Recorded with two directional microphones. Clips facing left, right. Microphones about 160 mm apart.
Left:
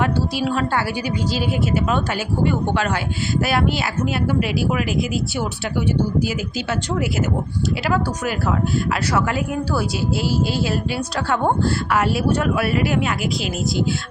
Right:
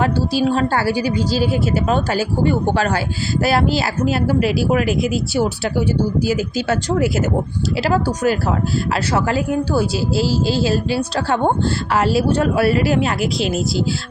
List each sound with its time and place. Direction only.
0.0 s a woman's voice: 30° right (ahead or behind)